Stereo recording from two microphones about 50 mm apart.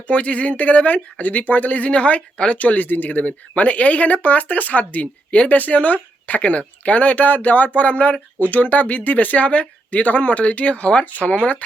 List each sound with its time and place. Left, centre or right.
0.1 s speech: left